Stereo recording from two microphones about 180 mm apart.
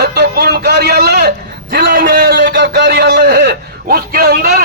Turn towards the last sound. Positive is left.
turn(degrees=-55)  # may be behind; listen again after turning